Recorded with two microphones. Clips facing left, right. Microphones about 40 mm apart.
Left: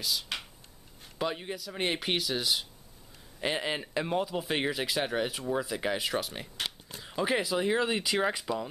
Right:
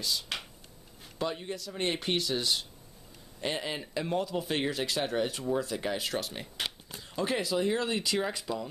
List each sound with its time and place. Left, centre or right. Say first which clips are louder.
0.0 s a sound: even; centre
1.1 s speech: left 1 dB; centre
2.0 s speech: even; centre
3.3 s speech: left 2 dB; centre
6.5 s a sound: even; centre
7.0 s speech: left 2 dB; centre